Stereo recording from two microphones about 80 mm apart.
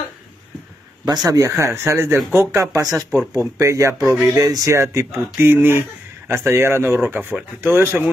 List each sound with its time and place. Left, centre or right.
1.0 s speech: right
2.6 s speech: right